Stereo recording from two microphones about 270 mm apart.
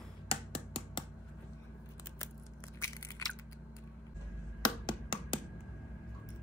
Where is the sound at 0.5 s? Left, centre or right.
Centre.